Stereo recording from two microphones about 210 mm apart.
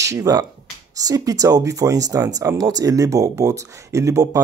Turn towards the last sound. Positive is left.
turn(degrees=-15)  # may be behind; listen again after turning